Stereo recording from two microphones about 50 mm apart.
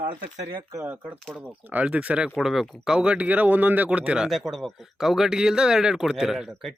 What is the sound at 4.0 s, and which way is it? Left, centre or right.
Speech, right.